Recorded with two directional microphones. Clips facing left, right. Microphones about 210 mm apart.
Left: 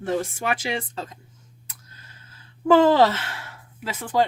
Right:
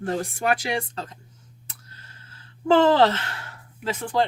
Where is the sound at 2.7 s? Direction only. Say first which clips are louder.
Left 1 dB; 10° left (ahead or behind).